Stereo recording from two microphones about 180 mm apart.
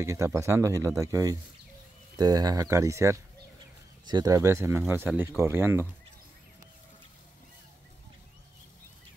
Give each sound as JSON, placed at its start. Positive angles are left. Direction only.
{"t": 0.0, "sound": "speech", "side_deg": -15}